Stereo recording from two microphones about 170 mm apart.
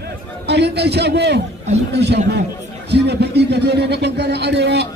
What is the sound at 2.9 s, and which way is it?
A man's voice, 80° right.